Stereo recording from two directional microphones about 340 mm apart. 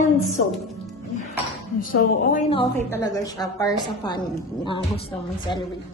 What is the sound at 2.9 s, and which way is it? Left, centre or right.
Speech, centre.